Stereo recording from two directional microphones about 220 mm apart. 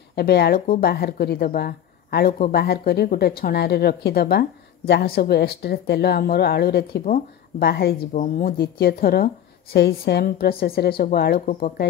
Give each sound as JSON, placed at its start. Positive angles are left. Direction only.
{"t": 0.1, "sound": "speech", "side_deg": 45}